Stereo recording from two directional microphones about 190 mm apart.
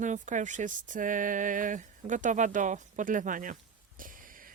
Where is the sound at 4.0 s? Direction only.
45° right (ahead or behind).